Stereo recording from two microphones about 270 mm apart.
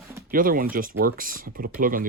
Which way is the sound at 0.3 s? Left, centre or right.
Right.